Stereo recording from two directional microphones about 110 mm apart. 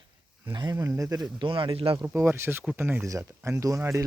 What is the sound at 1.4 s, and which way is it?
Speech, 50° right (ahead or behind).